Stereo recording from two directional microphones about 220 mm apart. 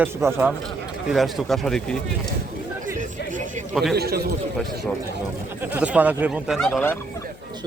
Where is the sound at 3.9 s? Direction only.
45° right (ahead or behind).